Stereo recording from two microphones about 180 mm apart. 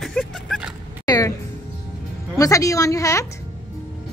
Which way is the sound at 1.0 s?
20° left (ahead or behind).